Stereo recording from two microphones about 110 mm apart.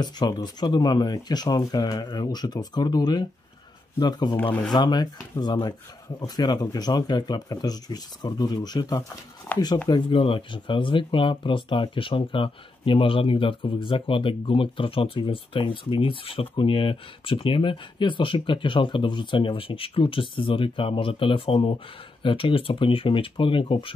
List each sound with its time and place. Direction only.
0.0 s speech: 40° left (ahead or behind)
4.4 s speech: 15° left (ahead or behind)
4.7 s speech: 40° left (ahead or behind)
9.8 s speech: 45° left (ahead or behind)